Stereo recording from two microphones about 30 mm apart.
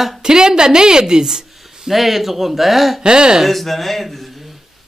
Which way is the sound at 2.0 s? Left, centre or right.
Centre.